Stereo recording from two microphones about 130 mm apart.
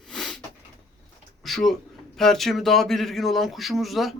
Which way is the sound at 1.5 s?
Centre (ahead or behind).